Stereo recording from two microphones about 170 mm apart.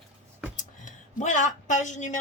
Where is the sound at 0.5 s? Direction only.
50° left (ahead or behind).